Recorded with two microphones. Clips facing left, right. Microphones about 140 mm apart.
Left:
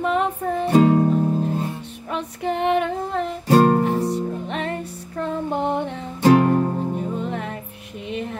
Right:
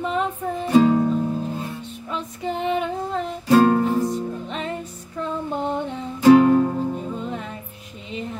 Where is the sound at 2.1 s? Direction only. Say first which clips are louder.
Left 3 dB; 65° left (ahead or behind).